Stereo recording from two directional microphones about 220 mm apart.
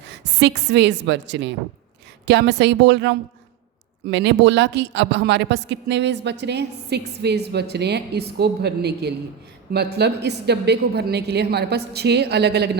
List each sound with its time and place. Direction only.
0.1 s a woman's voice: 50° right (ahead or behind)